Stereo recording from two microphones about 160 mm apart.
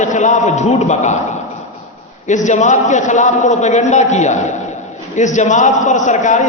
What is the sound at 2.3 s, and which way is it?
A man's voice, 50° left (ahead or behind).